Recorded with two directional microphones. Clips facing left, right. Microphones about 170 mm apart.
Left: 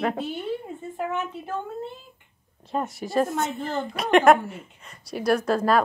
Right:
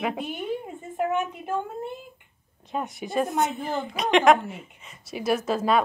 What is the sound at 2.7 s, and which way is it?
A woman's voice, centre (ahead or behind).